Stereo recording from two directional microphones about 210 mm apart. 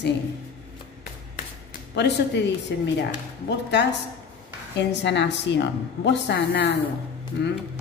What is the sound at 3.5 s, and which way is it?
A woman's voice, 55° left (ahead or behind).